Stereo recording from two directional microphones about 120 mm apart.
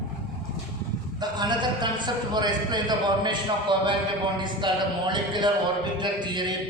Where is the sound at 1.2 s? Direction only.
35° right (ahead or behind).